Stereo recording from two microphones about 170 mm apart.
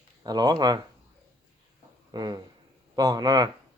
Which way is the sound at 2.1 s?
25° right (ahead or behind).